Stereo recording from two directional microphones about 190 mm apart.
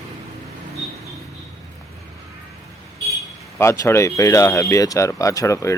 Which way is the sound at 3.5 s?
15° left (ahead or behind).